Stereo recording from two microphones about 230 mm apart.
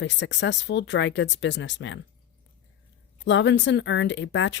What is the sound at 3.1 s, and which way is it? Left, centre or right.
Speech, left.